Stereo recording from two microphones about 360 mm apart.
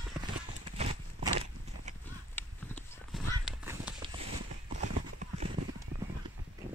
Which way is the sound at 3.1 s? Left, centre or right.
Centre.